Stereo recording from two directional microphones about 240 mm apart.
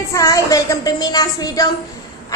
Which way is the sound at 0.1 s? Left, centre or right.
Centre.